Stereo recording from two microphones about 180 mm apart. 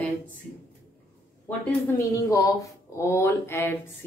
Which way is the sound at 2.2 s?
15° left (ahead or behind).